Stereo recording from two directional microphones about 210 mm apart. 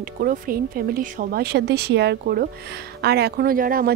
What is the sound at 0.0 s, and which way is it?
Speech, 45° right (ahead or behind).